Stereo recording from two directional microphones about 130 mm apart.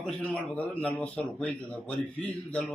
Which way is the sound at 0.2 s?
10° left (ahead or behind).